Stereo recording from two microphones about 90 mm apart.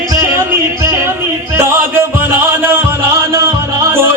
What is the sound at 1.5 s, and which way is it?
Music, 25° right (ahead or behind).